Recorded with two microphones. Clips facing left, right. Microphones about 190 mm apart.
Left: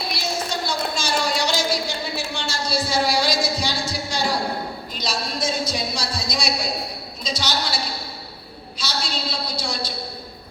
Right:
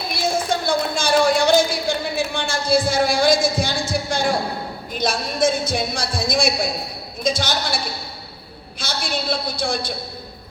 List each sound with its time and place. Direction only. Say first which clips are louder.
0.1 s a sound: right 8 dB; 50° right (ahead or behind)
4.9 s speech: right 7 dB; 50° right (ahead or behind)
8.8 s speech: right 2 dB; 50° right (ahead or behind)